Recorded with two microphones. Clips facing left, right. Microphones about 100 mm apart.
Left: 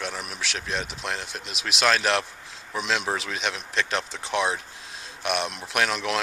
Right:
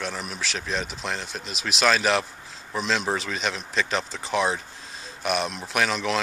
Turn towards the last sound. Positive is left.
turn(degrees=0)  # may be behind; listen again after turning